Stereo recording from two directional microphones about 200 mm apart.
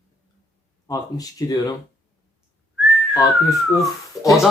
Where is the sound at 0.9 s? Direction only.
20° left (ahead or behind).